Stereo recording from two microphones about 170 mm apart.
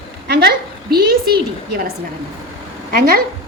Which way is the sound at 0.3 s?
70° right (ahead or behind).